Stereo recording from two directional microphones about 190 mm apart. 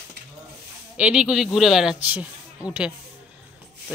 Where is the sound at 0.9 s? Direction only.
5° right (ahead or behind).